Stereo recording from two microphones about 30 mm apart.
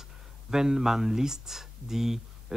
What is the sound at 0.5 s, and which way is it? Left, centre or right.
Speech, centre.